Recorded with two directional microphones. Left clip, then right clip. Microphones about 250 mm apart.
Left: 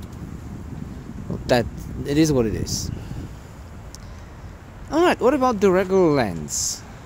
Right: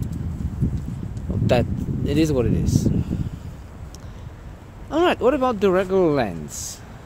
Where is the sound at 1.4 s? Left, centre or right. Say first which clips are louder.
Even; centre.